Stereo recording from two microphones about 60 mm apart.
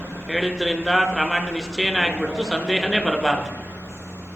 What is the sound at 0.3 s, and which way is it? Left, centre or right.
A man's voice, centre.